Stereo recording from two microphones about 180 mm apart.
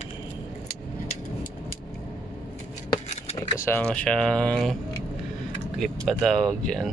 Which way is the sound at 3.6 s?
10° left (ahead or behind).